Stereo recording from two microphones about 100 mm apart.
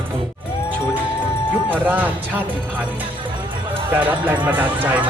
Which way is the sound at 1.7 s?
15° right (ahead or behind).